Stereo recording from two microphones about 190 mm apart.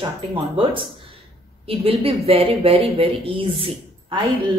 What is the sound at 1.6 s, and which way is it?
Speech, 30° right (ahead or behind).